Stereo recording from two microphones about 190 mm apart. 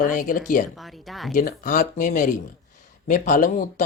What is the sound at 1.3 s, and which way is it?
Speech, 45° left (ahead or behind).